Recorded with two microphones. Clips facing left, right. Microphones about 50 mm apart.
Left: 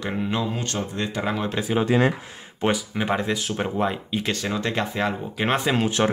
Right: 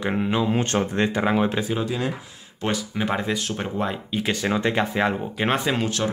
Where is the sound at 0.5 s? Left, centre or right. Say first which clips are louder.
Right 6 dB; right.